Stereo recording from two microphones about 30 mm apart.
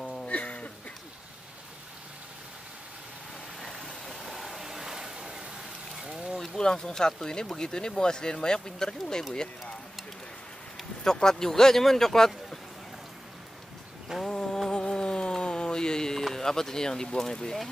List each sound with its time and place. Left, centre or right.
0.0 s a sound: left
0.3 s a sound: left
3.7 s vehicle: centre
4.6 s vehicle: centre
6.5 s speech: left
11.1 s speech: centre
14.2 s mantra: left
14.7 s a sound: left
16.3 s speech: centre